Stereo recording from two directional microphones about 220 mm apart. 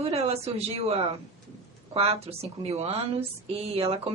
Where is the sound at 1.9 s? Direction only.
25° right (ahead or behind).